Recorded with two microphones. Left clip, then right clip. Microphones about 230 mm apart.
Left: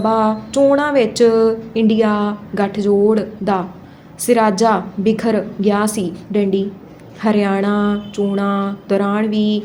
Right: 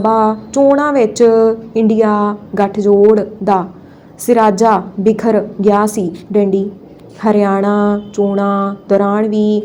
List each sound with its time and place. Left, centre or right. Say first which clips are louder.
0.0 s a woman's voice: right 4 dB; centre